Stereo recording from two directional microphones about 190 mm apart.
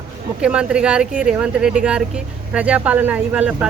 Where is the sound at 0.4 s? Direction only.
5° right (ahead or behind).